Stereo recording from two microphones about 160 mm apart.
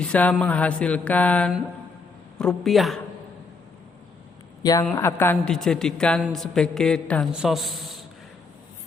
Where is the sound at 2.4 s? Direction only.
Centre (ahead or behind).